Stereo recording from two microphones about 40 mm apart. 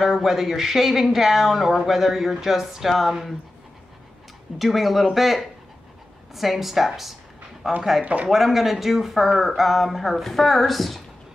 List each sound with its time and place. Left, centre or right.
0.0 s speech: centre
4.6 s speech: centre
8.0 s speech: right
8.3 s speech: centre